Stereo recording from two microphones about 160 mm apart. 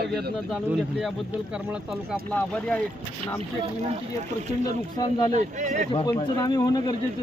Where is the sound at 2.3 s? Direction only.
10° left (ahead or behind).